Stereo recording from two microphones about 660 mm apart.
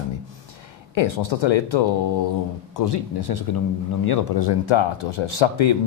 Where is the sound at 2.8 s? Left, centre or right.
Left.